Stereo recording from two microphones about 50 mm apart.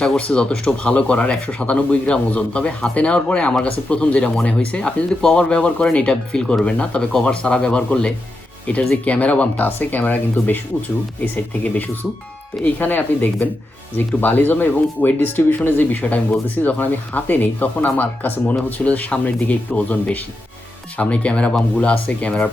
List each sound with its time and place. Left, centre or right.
0.2 s speech: centre
7.1 s speech: centre
9.0 s speech: left
11.6 s speech: left